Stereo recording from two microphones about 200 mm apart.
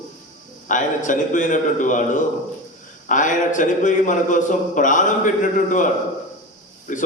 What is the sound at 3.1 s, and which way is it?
A man's voice, 40° left (ahead or behind).